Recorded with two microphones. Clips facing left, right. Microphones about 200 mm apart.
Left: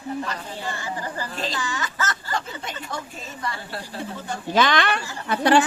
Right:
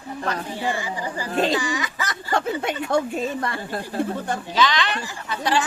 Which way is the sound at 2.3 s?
60° right (ahead or behind).